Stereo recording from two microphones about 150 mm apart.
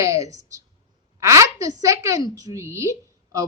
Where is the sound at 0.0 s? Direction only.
20° right (ahead or behind).